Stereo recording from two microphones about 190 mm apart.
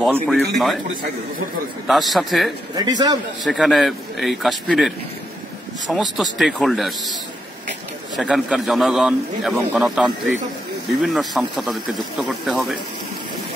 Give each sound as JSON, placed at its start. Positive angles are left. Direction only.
{"t": 0.0, "sound": "a man's voice", "side_deg": 0}
{"t": 1.9, "sound": "a man's voice", "side_deg": 0}
{"t": 2.7, "sound": "a man's voice", "side_deg": -20}
{"t": 3.4, "sound": "a man's voice", "side_deg": 0}
{"t": 8.3, "sound": "a man's voice", "side_deg": -5}